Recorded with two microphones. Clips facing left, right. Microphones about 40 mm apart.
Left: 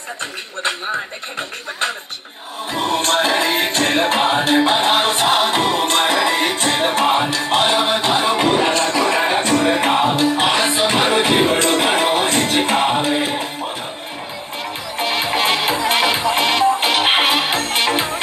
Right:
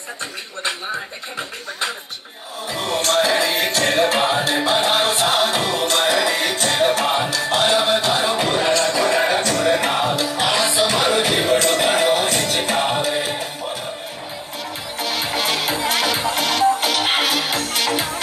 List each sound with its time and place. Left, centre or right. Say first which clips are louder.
2.7 s music: left 2 dB; left
15.0 s music: left 4 dB; left